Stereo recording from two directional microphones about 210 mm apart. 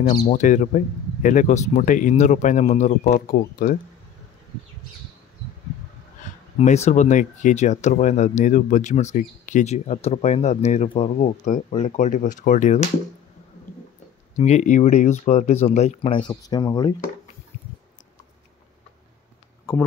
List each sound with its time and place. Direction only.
0.3 s speech: 35° left (ahead or behind)
6.6 s speech: 35° left (ahead or behind)
14.3 s speech: 35° left (ahead or behind)